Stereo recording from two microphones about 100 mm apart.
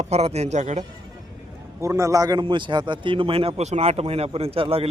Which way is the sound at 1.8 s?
30° right (ahead or behind).